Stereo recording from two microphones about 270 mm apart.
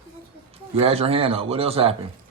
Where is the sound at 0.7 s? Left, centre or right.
Right.